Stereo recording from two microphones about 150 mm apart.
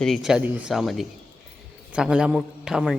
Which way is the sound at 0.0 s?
Centre (ahead or behind).